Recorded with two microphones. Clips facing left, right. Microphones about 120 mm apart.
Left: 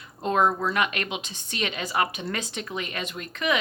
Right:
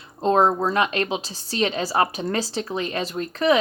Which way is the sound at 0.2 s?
30° right (ahead or behind).